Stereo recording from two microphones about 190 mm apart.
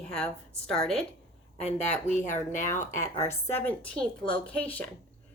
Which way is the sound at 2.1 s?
40° left (ahead or behind).